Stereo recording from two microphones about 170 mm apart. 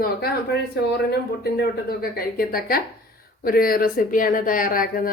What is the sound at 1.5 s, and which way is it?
Speech, 60° left (ahead or behind).